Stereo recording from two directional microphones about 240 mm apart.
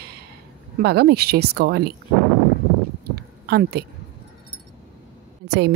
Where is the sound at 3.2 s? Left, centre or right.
Right.